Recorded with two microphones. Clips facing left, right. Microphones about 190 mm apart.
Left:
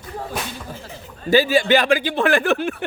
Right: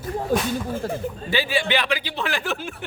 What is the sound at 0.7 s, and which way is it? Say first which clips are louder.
Speech: right 11 dB; 50° right (ahead or behind).